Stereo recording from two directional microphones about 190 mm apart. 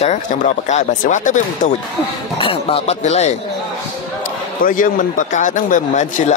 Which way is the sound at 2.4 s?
30° left (ahead or behind).